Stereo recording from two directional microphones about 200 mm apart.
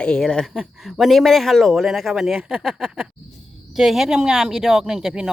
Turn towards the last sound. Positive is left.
turn(degrees=0)  # may be behind; listen again after turning